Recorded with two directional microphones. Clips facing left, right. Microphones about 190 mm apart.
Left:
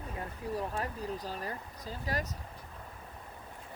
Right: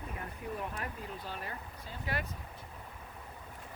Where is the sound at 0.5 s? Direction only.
35° left (ahead or behind).